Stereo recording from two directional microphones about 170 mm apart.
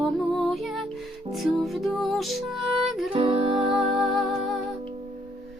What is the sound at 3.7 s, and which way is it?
Music, centre (ahead or behind).